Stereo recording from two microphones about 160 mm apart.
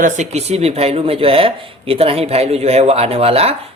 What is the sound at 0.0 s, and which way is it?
Speech, 45° right (ahead or behind).